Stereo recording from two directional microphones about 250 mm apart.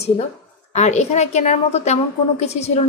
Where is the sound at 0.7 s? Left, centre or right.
Left.